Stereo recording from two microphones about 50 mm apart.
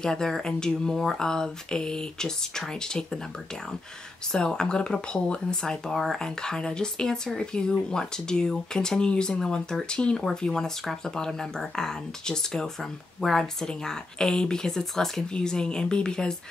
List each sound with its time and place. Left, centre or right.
0.0 s speech: centre
4.3 s speech: centre